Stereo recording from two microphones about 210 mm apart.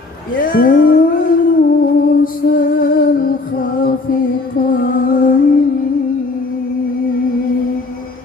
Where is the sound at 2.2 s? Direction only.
40° left (ahead or behind).